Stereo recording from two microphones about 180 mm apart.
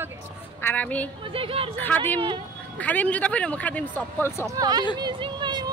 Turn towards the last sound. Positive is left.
turn(degrees=-25)  # may be behind; listen again after turning